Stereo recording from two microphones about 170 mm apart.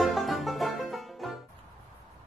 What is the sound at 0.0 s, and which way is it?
Music, centre (ahead or behind).